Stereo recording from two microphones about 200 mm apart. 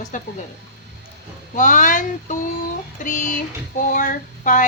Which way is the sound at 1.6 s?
40° left (ahead or behind).